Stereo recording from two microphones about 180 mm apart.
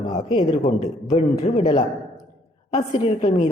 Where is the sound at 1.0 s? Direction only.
40° left (ahead or behind).